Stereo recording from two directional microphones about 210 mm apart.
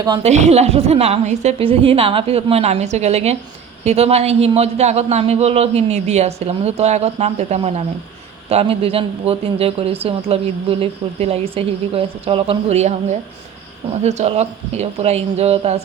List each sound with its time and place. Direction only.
0.2 s a woman's voice: 30° right (ahead or behind)